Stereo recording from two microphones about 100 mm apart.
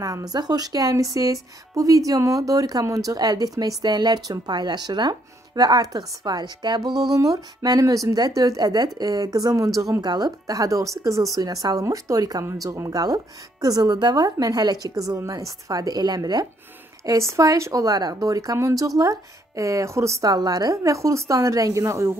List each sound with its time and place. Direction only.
0.0 s a woman's voice: 35° right (ahead or behind)
17.0 s a woman's voice: 30° right (ahead or behind)